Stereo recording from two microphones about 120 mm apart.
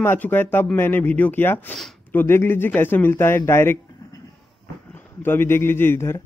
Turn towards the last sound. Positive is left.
turn(degrees=20)  # may be behind; listen again after turning